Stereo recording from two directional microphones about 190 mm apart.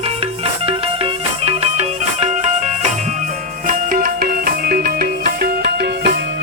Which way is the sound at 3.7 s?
45° right (ahead or behind).